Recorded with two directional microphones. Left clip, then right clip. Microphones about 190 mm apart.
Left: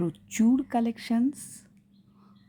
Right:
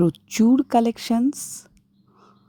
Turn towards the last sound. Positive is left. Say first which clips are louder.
# right 6 dB
turn(degrees=-40)  # may be behind; listen again after turning